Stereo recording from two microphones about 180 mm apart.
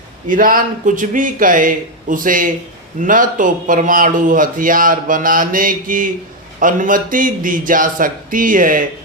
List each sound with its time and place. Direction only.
0.3 s speech: 50° right (ahead or behind)